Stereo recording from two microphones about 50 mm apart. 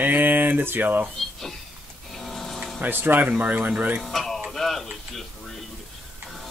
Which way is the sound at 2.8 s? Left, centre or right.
Right.